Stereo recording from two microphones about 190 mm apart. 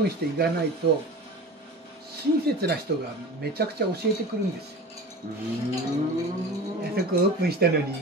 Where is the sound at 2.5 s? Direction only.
55° right (ahead or behind).